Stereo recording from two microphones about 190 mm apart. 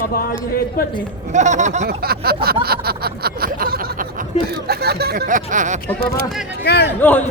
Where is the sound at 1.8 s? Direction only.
55° right (ahead or behind).